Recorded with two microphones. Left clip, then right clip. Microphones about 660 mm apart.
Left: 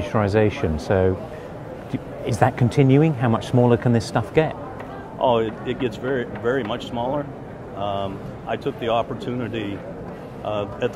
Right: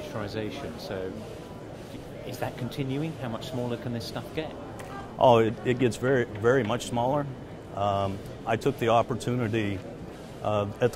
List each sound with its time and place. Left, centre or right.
0.1 s speech: left
2.2 s speech: left
5.2 s speech: right